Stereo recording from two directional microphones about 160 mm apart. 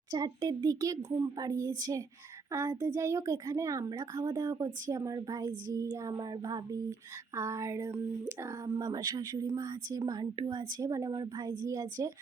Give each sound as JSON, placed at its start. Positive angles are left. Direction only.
{"t": 0.1, "sound": "a child's voice", "side_deg": -25}